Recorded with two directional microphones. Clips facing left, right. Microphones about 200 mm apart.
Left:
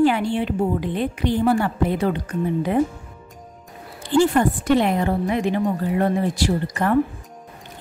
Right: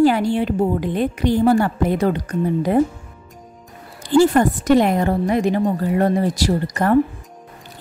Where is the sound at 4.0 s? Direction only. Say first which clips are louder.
Right 3 dB; 40° right (ahead or behind).